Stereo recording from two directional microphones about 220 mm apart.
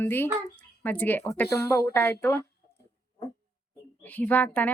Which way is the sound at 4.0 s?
5° left (ahead or behind).